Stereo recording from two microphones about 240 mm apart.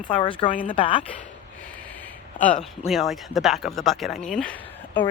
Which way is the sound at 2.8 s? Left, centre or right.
Centre.